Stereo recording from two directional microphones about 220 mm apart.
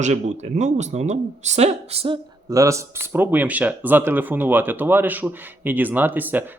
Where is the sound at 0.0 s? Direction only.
35° right (ahead or behind).